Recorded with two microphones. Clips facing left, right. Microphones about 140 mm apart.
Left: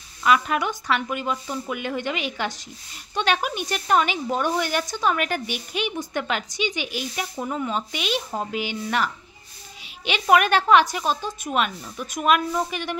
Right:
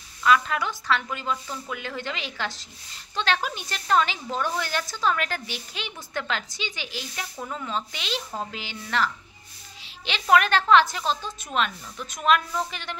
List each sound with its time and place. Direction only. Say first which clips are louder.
0.2 s a woman's voice: left 1 dB; 15° left (ahead or behind)